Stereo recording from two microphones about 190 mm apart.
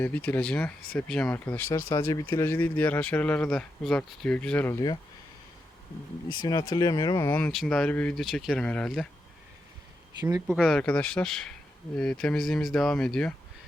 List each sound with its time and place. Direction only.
0.0 s speech: 10° left (ahead or behind)
6.4 s speech: 20° left (ahead or behind)
7.3 s speech: 10° left (ahead or behind)
10.2 s speech: 20° right (ahead or behind)
10.4 s speech: 5° right (ahead or behind)